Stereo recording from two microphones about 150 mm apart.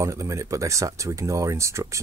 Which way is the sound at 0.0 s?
20° right (ahead or behind).